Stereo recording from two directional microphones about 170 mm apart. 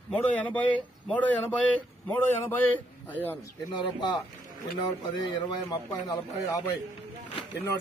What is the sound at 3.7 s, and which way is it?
Speech, 25° left (ahead or behind).